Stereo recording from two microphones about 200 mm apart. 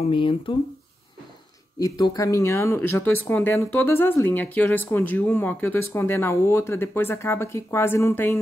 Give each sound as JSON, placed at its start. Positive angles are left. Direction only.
{"t": 0.0, "sound": "speech", "side_deg": 25}
{"t": 1.8, "sound": "speech", "side_deg": 20}